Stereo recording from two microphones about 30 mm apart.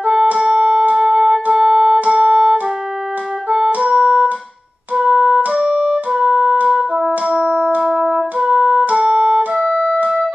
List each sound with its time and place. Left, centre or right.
0.6 s music: right
1.6 s music: centre
2.0 s music: right
3.8 s music: right
5.6 s music: right
6.2 s music: right
7.2 s music: right
8.5 s music: right
8.9 s music: right
9.6 s music: right